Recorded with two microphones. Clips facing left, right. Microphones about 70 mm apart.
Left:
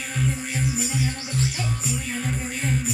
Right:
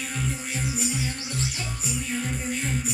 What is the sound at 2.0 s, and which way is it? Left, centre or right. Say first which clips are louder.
Music: left 1 dB; left.